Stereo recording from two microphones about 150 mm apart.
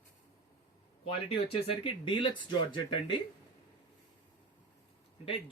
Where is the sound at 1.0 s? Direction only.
35° left (ahead or behind).